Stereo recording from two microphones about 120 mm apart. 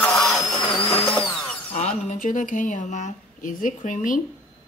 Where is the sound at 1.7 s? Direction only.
85° left.